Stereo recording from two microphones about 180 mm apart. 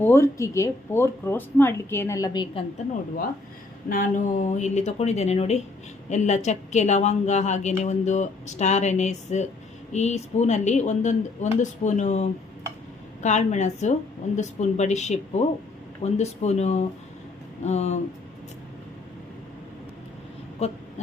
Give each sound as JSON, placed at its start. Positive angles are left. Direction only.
{"t": 0.0, "sound": "speech", "side_deg": 15}
{"t": 3.8, "sound": "a woman's voice", "side_deg": 50}
{"t": 13.2, "sound": "a woman's voice", "side_deg": 40}